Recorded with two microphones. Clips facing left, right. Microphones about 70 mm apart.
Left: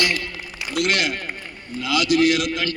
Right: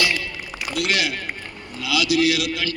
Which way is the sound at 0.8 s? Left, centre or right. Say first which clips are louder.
Left 2 dB; left.